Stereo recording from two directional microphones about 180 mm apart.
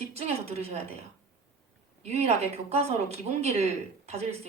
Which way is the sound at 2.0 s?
35° right (ahead or behind).